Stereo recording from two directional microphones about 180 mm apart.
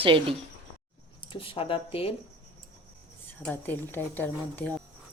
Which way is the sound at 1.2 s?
30° left (ahead or behind).